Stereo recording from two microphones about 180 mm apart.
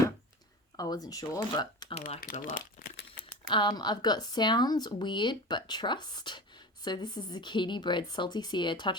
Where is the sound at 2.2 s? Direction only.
50° left (ahead or behind).